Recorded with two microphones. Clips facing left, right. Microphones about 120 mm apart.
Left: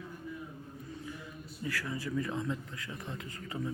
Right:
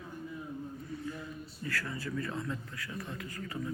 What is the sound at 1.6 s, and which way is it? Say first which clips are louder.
A man's voice: left 1 dB; 15° left (ahead or behind).